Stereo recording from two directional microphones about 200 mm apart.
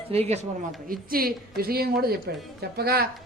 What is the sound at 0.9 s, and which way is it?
Speech, 45° right (ahead or behind).